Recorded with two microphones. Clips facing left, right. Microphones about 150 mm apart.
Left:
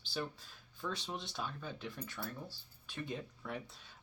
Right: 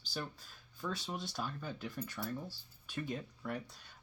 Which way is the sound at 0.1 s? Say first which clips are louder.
Left 2 dB; centre (ahead or behind).